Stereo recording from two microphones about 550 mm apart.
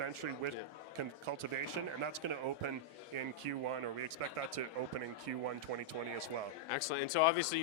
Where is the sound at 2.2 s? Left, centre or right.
Right.